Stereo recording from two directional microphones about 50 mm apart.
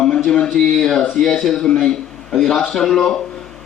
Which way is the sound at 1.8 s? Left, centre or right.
Centre.